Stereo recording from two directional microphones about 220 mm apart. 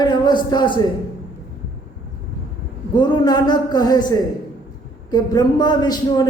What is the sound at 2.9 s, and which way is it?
A man's voice, 20° left (ahead or behind).